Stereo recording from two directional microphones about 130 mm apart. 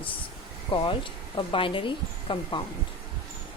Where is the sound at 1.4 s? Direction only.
40° left (ahead or behind).